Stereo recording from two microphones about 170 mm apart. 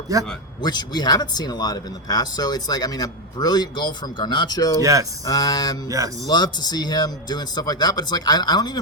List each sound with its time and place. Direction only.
0.1 s speech: 20° right (ahead or behind)
0.6 s speech: 25° left (ahead or behind)
4.8 s speech: 20° right (ahead or behind)
5.2 s speech: 20° left (ahead or behind)
5.9 s speech: 20° right (ahead or behind)
6.2 s speech: 25° left (ahead or behind)